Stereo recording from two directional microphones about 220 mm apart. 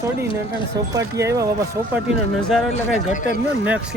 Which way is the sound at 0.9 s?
15° right (ahead or behind).